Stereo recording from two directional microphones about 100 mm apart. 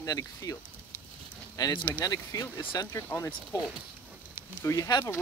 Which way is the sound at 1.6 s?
35° left (ahead or behind).